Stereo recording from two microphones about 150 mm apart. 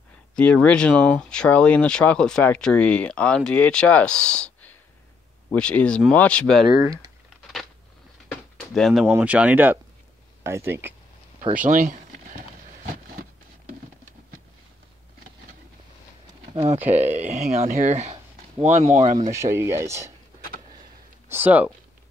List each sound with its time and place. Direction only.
0.4 s speech: 5° left (ahead or behind)
8.3 s a sound: 5° left (ahead or behind)
9.0 s speech: 10° right (ahead or behind)
11.5 s speech: 65° right (ahead or behind)
16.9 s speech: 55° right (ahead or behind)
19.3 s speech: 20° right (ahead or behind)
21.3 s speech: 10° right (ahead or behind)